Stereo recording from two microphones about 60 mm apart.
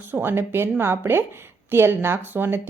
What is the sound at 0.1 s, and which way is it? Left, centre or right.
A woman's voice, right.